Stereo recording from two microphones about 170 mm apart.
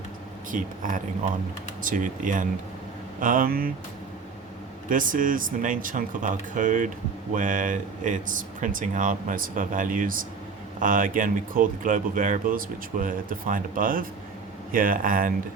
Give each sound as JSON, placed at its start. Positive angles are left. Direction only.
{"t": 0.5, "sound": "speech", "side_deg": -50}
{"t": 4.9, "sound": "speech", "side_deg": -50}